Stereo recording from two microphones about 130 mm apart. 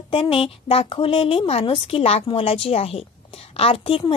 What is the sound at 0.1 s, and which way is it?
A woman's voice, 45° left (ahead or behind).